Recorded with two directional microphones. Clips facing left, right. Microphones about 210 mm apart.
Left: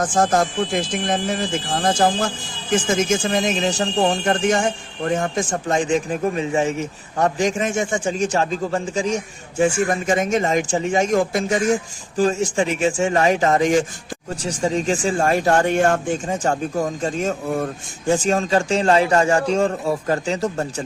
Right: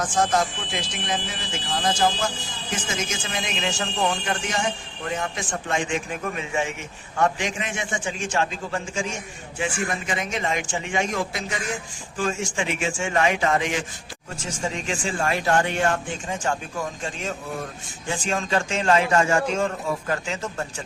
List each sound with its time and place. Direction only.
0.0 s speech: 50° left (ahead or behind)